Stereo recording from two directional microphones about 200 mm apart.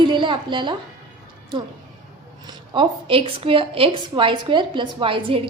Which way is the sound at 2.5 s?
25° right (ahead or behind).